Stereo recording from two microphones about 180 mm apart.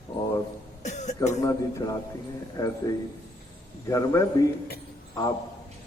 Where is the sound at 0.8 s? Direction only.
40° left (ahead or behind).